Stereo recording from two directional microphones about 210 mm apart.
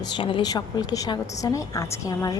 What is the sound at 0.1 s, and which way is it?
A woman's voice, 25° left (ahead or behind).